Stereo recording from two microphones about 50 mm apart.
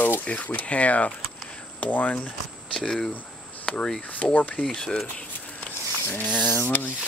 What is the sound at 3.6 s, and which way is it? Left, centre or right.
Speech, centre.